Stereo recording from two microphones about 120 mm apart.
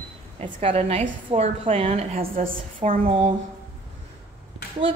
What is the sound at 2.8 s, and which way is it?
Speech, 40° right (ahead or behind).